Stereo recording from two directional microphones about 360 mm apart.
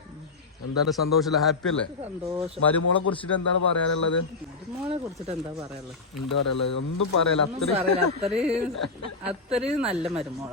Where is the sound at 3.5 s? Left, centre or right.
Left.